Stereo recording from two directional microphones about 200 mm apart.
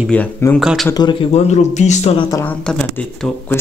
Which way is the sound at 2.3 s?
5° left (ahead or behind).